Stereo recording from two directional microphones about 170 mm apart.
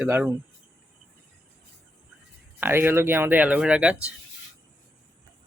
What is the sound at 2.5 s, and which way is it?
Speech, 10° right (ahead or behind).